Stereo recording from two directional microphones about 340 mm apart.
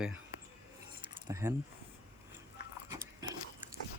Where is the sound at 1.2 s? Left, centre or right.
Centre.